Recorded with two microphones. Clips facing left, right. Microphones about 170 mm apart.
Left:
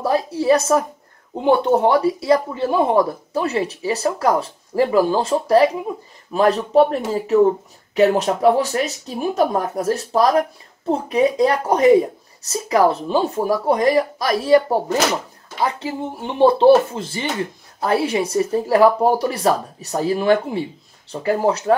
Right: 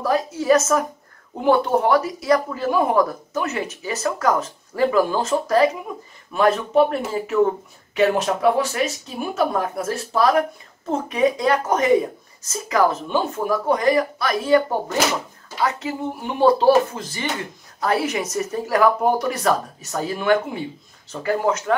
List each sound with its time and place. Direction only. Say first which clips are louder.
0.0 s speech: left 3 dB; 30° left (ahead or behind)
1.3 s speech: left 2 dB; 20° left (ahead or behind)